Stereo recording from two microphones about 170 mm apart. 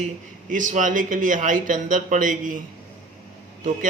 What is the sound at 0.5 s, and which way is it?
A man's voice, 50° right (ahead or behind).